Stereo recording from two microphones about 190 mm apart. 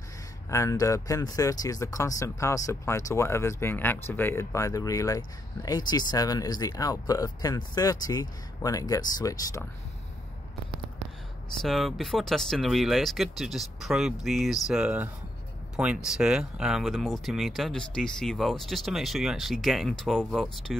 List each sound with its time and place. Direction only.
0.5 s speech: 15° left (ahead or behind)
11.6 s speech: centre (ahead or behind)